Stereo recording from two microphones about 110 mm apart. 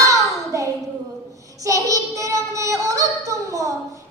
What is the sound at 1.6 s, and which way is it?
Child singing, 30° right (ahead or behind).